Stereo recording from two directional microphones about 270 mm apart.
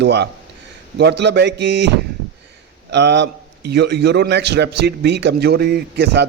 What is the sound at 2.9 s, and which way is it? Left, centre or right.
A man's voice, right.